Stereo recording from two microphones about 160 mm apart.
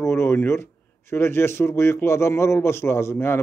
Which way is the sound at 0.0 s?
15° left (ahead or behind).